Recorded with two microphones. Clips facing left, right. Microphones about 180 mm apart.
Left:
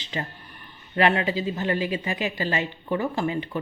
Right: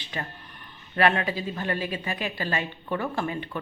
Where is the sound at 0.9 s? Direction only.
15° left (ahead or behind).